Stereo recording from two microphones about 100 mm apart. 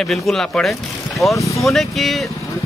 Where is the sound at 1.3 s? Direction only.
30° left (ahead or behind).